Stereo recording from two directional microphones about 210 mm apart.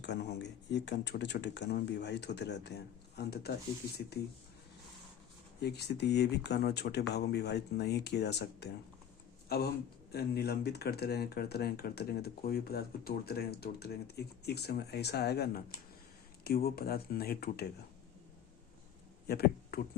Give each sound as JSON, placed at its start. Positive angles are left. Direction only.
{"t": 0.0, "sound": "speech", "side_deg": 55}
{"t": 5.5, "sound": "speech", "side_deg": 50}
{"t": 16.6, "sound": "speech", "side_deg": 45}
{"t": 19.3, "sound": "a sound", "side_deg": 50}